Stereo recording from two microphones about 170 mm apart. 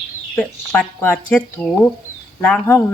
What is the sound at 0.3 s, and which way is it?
Speech, 10° left (ahead or behind).